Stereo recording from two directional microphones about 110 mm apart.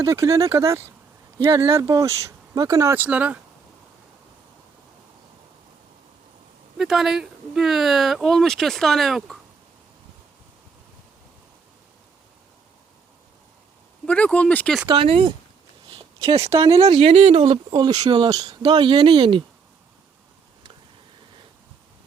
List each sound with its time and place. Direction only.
0.0 s speech: 30° right (ahead or behind)
2.9 s speech: 15° right (ahead or behind)
6.7 s speech: centre (ahead or behind)
14.0 s speech: 10° left (ahead or behind)
14.8 s speech: 60° right (ahead or behind)
15.9 s a sound: 60° right (ahead or behind)
16.3 s speech: 30° right (ahead or behind)
16.6 s speech: 60° right (ahead or behind)